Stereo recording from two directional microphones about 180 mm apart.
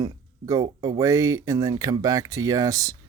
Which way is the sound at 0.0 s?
20° right (ahead or behind).